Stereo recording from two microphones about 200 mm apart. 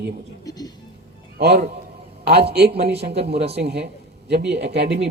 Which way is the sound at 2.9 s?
30° right (ahead or behind).